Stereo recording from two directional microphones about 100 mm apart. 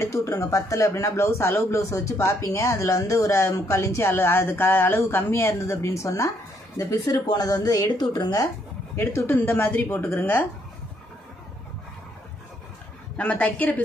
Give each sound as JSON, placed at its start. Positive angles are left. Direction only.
{"t": 0.0, "sound": "speech", "side_deg": 30}
{"t": 8.9, "sound": "speech", "side_deg": 25}
{"t": 13.2, "sound": "a woman's voice", "side_deg": 15}